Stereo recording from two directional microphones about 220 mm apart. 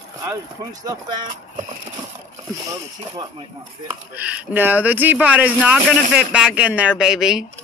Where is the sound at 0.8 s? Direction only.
20° right (ahead or behind).